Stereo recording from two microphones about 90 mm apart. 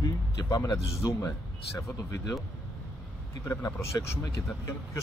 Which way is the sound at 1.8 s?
40° left (ahead or behind).